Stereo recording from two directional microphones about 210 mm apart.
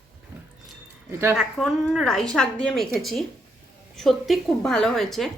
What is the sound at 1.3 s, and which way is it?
A woman's voice, centre (ahead or behind).